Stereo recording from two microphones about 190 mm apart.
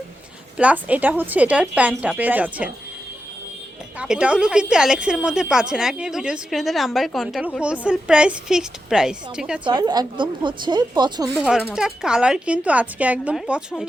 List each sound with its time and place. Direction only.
0.5 s a woman's voice: 5° right (ahead or behind)
3.9 s a woman's voice: 5° right (ahead or behind)
9.6 s speech: 20° right (ahead or behind)
11.3 s a woman's voice: 5° right (ahead or behind)